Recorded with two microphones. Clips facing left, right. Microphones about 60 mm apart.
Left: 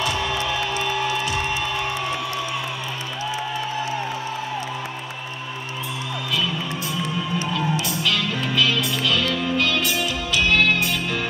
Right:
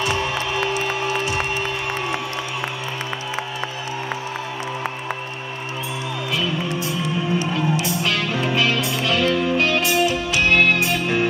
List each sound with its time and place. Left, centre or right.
7.3 s music: right